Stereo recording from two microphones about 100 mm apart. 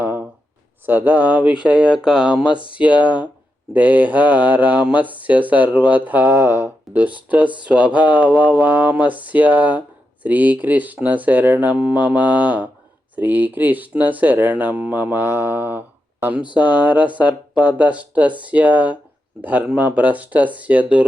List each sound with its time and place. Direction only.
0.0 s a sound: 20° right (ahead or behind)
0.9 s speech: 20° right (ahead or behind)
2.4 s speech: 55° left (ahead or behind)
2.7 s speech: 15° right (ahead or behind)